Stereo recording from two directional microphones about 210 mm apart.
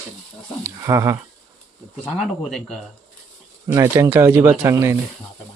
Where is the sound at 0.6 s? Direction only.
15° right (ahead or behind).